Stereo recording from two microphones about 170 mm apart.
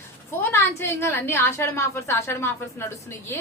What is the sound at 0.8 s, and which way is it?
A woman's voice, 15° left (ahead or behind).